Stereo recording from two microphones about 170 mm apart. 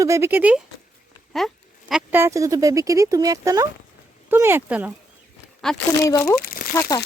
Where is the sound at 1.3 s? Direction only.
Centre (ahead or behind).